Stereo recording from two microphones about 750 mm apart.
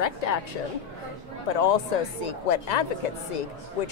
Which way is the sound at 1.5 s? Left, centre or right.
Left.